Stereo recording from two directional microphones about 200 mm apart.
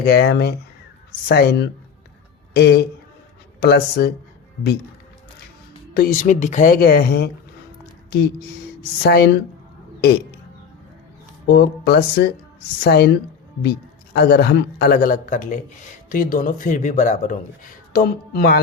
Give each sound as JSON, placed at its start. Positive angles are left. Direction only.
{"t": 0.0, "sound": "speech", "side_deg": 50}
{"t": 5.9, "sound": "speech", "side_deg": 45}
{"t": 9.0, "sound": "speech", "side_deg": 55}
{"t": 11.4, "sound": "speech", "side_deg": 55}